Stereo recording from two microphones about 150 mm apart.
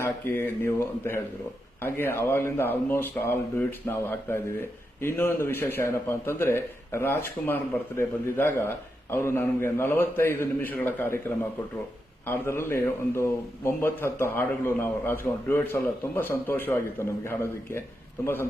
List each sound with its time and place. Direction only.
0.0 s a man's voice: 15° left (ahead or behind)
12.2 s a man's voice: 15° left (ahead or behind)